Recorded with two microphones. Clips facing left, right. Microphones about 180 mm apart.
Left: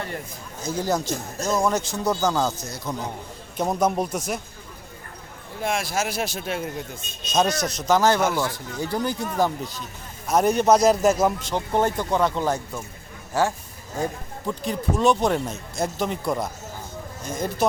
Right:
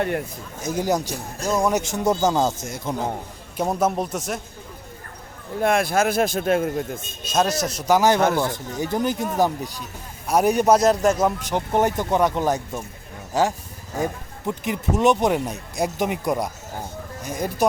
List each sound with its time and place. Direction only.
0.6 s speech: 15° right (ahead or behind)
3.6 s a man's voice: 5° right (ahead or behind)
5.6 s speech: 55° right (ahead or behind)
7.3 s speech: 5° right (ahead or behind)
10.8 s a man's voice: centre (ahead or behind)
11.5 s speech: 15° right (ahead or behind)